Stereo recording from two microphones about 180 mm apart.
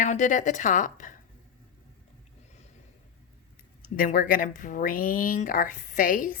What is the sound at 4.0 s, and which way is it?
A woman's voice, 50° left (ahead or behind).